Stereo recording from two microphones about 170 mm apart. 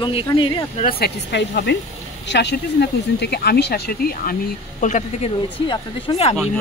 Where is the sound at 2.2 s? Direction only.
85° left; by 5.3 s 45° left (ahead or behind).